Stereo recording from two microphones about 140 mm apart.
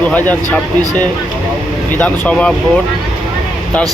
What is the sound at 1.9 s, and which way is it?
Speech, 10° left (ahead or behind).